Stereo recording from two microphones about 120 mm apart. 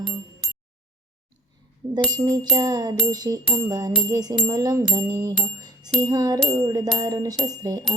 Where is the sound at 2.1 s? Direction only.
35° right (ahead or behind).